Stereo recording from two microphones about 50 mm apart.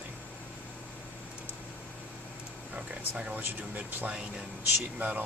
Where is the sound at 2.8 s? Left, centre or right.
Right.